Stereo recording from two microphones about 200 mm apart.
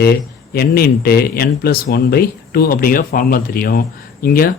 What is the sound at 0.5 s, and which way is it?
Speech, 50° left (ahead or behind).